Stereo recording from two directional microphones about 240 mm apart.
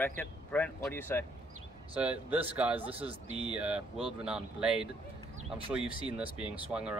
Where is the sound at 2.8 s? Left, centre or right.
Right.